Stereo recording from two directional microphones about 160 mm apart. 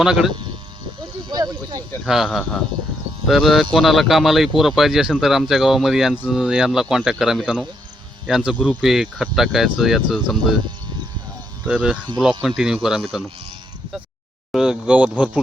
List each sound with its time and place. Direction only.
0.0 s speech: 5° right (ahead or behind)
1.3 s speech: 25° right (ahead or behind)
2.0 s speech: centre (ahead or behind)
11.7 s speech: 5° right (ahead or behind)
14.5 s speech: 5° right (ahead or behind)